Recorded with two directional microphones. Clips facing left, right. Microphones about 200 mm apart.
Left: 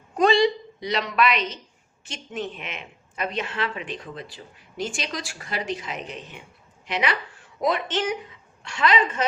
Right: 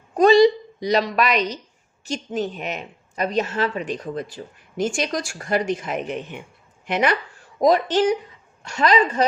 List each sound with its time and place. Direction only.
0.2 s a woman's voice: 40° right (ahead or behind)
7.6 s a woman's voice: 40° right (ahead or behind)